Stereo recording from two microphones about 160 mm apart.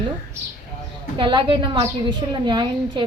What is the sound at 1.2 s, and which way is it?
A woman's voice, 30° right (ahead or behind).